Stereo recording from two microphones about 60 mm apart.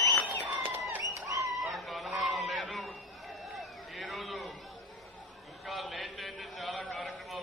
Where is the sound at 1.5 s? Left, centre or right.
Centre.